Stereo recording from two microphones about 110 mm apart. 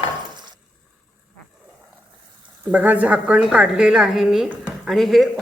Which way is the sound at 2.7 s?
15° right (ahead or behind).